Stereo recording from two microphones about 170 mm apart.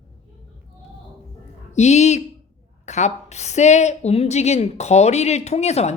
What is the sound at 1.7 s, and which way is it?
A woman's voice, 40° left (ahead or behind).